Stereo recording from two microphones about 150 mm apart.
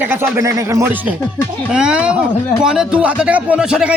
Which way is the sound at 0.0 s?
15° right (ahead or behind).